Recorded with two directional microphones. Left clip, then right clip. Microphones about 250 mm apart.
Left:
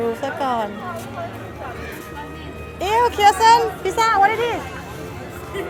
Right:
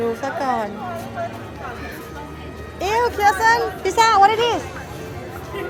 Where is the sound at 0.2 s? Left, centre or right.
Centre.